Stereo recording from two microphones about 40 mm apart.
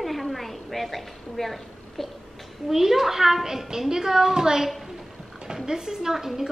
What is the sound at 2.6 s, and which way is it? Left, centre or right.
A woman's voice, centre.